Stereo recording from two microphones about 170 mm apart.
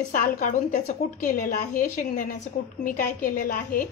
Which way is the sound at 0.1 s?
50° left (ahead or behind).